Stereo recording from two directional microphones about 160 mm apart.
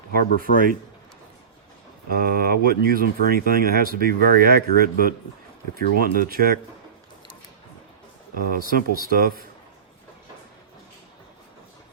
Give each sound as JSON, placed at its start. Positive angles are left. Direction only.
{"t": 0.3, "sound": "speech", "side_deg": 60}
{"t": 2.0, "sound": "speech", "side_deg": -70}
{"t": 8.6, "sound": "speech", "side_deg": -65}